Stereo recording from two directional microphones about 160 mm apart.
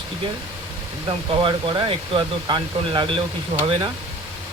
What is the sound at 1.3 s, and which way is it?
Speech, 30° right (ahead or behind).